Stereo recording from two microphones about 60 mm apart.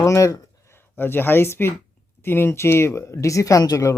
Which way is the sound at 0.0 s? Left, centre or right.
Left.